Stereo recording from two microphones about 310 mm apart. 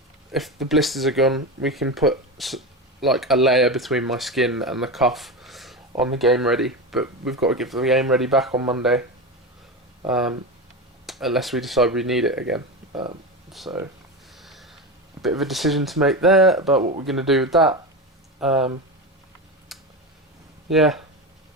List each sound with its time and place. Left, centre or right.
0.3 s speech: centre
10.0 s speech: centre
14.3 s snort: centre
15.2 s speech: centre
16.8 s speech: centre
17.1 s speech: centre
19.7 s a sound: centre
20.7 s speech: centre